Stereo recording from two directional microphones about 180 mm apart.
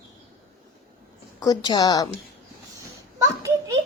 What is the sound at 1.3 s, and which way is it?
Speech, 20° left (ahead or behind).